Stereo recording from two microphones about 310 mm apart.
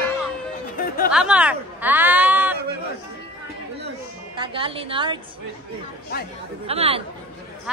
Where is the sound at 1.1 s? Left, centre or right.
Centre.